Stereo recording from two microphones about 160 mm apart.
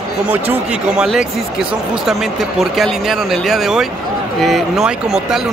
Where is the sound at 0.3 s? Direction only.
10° right (ahead or behind).